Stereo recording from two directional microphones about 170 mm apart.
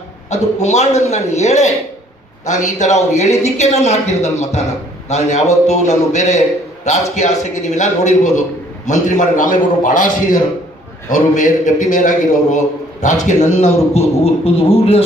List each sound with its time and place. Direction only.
0.3 s a man's voice: 40° left (ahead or behind)